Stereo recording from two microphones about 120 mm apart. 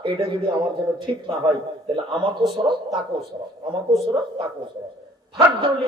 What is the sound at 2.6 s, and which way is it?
Speech, 30° right (ahead or behind).